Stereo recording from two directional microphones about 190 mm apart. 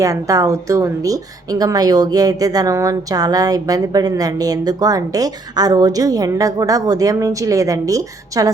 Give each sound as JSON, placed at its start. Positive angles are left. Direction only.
{"t": 0.0, "sound": "a woman's voice", "side_deg": -15}